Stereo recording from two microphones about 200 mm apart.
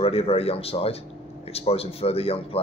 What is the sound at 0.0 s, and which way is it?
Speech, 30° left (ahead or behind).